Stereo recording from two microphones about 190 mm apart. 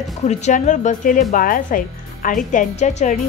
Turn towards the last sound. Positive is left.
turn(degrees=35)  # may be behind; listen again after turning